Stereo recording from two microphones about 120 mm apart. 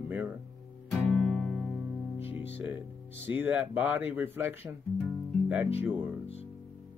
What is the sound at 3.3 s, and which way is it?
Speech, 15° right (ahead or behind).